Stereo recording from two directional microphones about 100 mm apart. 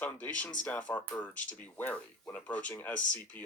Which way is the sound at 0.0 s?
15° left (ahead or behind).